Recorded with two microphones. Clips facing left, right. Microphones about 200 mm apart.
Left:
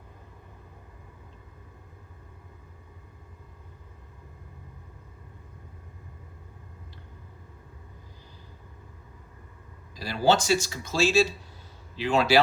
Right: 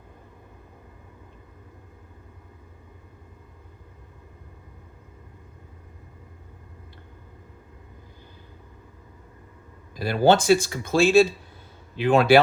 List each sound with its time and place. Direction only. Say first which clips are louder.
9.9 s speech: right 5 dB; 55° right (ahead or behind)